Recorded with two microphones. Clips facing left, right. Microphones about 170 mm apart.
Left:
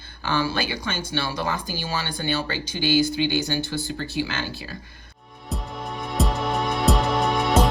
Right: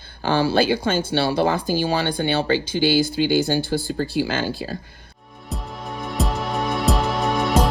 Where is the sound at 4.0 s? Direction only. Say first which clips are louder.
Right 6 dB; 50° right (ahead or behind).